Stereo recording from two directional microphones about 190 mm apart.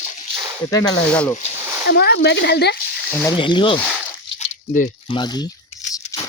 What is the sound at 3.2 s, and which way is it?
Speech, 25° left (ahead or behind).